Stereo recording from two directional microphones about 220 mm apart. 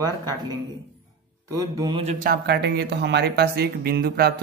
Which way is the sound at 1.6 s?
20° right (ahead or behind).